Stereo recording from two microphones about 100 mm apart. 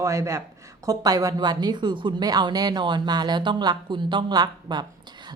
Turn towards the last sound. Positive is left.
turn(degrees=-45)  # may be behind; listen again after turning